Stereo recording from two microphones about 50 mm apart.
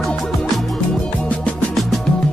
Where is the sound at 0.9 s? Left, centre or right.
Centre.